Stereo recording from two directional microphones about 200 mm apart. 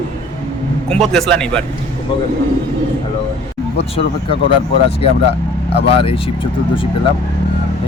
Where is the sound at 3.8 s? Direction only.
30° left (ahead or behind).